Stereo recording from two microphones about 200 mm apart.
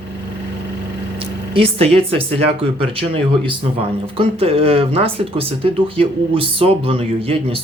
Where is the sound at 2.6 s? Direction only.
30° right (ahead or behind).